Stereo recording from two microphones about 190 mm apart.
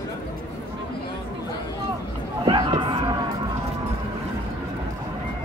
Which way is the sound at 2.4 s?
25° right (ahead or behind).